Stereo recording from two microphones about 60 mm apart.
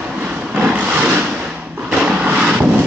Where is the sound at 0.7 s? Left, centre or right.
Right.